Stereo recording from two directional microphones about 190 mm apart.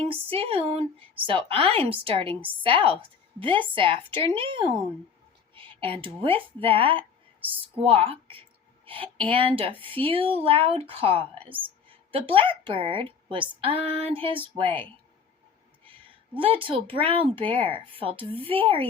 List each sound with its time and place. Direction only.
0.1 s a woman's voice: 30° right (ahead or behind)
15.9 s a woman's voice: 25° right (ahead or behind)